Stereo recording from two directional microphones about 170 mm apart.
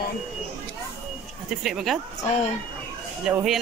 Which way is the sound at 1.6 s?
Centre (ahead or behind).